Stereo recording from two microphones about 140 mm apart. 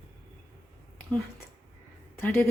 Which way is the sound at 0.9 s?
10° left (ahead or behind).